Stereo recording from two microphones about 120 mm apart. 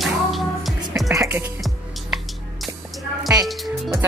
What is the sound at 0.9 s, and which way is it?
Music, 25° right (ahead or behind).